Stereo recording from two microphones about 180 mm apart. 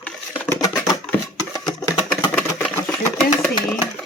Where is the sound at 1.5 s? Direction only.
25° left (ahead or behind).